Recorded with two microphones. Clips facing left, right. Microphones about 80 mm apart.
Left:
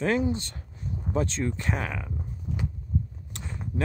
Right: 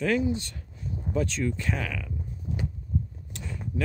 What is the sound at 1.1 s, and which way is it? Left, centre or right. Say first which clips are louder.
Speech: even; left.